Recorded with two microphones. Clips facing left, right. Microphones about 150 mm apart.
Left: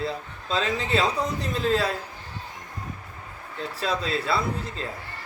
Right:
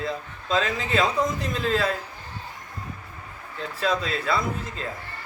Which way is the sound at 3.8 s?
35° left (ahead or behind).